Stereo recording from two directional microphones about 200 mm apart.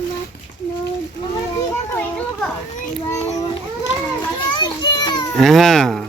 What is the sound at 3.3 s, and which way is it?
Speech, 20° left (ahead or behind).